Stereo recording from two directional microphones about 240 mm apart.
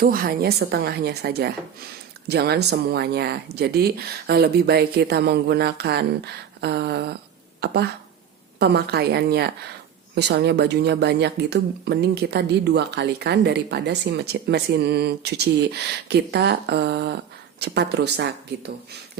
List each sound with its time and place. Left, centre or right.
0.0 s a woman's voice: right